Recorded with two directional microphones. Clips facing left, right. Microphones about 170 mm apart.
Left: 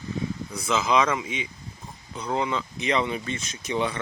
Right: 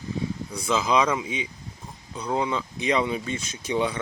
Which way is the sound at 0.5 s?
10° right (ahead or behind).